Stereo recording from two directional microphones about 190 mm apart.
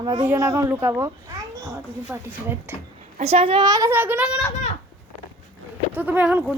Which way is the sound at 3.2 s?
35° right (ahead or behind).